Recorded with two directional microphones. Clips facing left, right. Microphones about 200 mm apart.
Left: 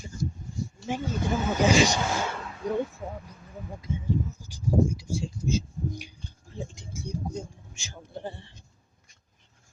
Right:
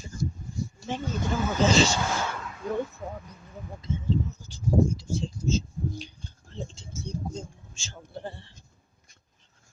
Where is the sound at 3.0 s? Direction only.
5° left (ahead or behind).